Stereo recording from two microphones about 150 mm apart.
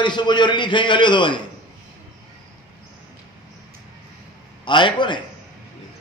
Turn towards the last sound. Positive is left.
turn(degrees=30)  # may be behind; listen again after turning